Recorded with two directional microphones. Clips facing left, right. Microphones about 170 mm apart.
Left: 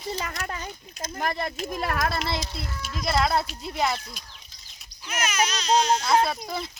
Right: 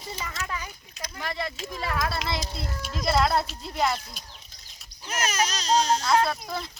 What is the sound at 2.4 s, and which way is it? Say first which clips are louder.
Speech: right 1 dB; 40° right (ahead or behind).